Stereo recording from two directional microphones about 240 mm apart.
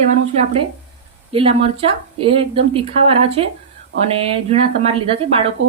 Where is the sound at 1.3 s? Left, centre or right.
Right.